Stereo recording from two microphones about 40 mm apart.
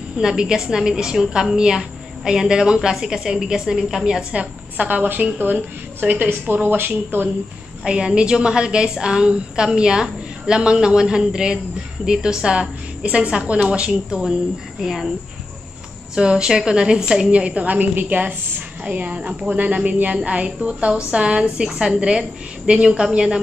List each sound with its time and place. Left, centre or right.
0.2 s a woman's voice: centre
4.3 s a woman's voice: right
7.8 s a woman's voice: right
14.8 s a woman's voice: centre
16.2 s a woman's voice: right
17.3 s speech: right
18.9 s a woman's voice: right; by 23.4 s centre